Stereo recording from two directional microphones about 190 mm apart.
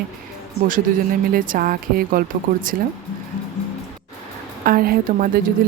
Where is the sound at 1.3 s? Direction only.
45° right (ahead or behind).